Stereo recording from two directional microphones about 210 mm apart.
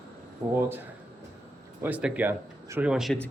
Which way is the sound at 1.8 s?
5° right (ahead or behind).